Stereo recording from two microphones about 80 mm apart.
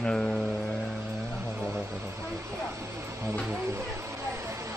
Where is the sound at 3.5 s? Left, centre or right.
Right.